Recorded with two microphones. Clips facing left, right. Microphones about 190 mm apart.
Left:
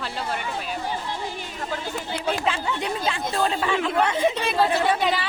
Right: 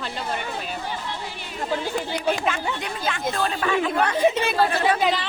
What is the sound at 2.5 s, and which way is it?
Speech, 30° left (ahead or behind).